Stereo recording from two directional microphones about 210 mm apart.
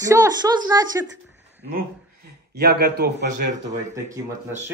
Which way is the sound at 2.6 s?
50° right (ahead or behind).